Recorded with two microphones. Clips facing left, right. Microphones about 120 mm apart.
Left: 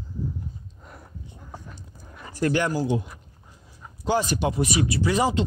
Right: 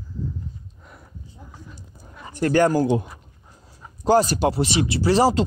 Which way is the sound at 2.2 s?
25° right (ahead or behind).